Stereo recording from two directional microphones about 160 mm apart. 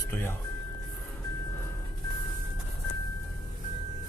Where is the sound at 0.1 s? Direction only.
15° left (ahead or behind).